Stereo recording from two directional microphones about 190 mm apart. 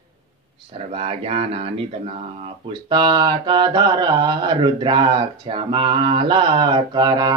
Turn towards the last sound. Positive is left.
turn(degrees=-20)  # may be behind; listen again after turning